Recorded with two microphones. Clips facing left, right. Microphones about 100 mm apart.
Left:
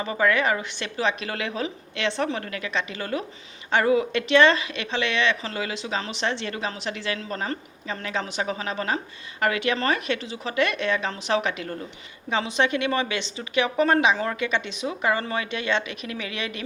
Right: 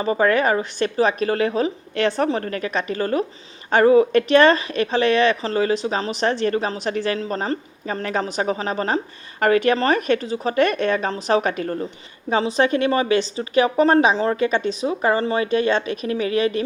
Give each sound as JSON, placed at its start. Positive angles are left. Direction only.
{"t": 0.0, "sound": "speech", "side_deg": -35}